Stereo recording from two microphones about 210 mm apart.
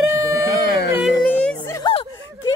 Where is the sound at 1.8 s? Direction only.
20° left (ahead or behind).